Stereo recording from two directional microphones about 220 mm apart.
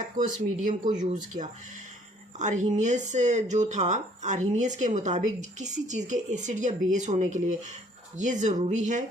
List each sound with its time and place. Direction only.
0.2 s speech: 35° right (ahead or behind)
2.4 s speech: 35° right (ahead or behind)